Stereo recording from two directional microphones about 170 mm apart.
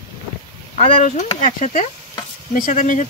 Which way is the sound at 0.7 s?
45° left (ahead or behind).